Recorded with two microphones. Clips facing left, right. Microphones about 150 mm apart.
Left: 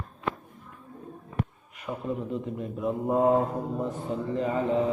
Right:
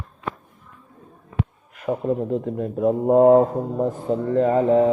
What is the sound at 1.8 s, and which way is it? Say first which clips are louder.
Speech: right 9 dB; 50° right (ahead or behind).